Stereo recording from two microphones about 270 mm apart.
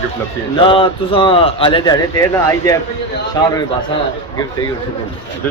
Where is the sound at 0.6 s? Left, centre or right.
Centre.